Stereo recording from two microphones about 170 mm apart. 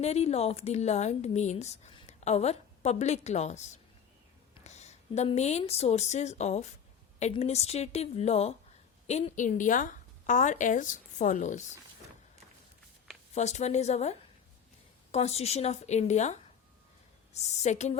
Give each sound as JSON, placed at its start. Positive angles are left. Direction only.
{"t": 0.0, "sound": "a woman's voice", "side_deg": 40}
{"t": 13.3, "sound": "a woman's voice", "side_deg": 40}